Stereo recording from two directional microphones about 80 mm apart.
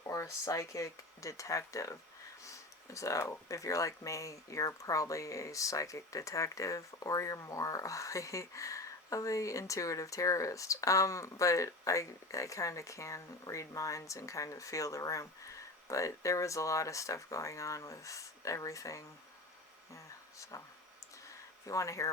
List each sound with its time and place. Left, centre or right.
0.0 s speech: left
20.5 s speech: left
21.7 s speech: left